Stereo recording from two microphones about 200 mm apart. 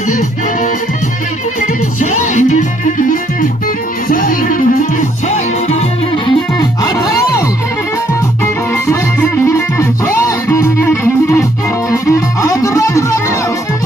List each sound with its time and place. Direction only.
1.6 s music: 40° left (ahead or behind)
6.2 s music: 20° left (ahead or behind)
8.7 s music: 15° left (ahead or behind)